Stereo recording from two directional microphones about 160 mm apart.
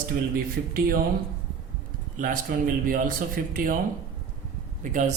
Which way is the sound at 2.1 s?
60° right (ahead or behind).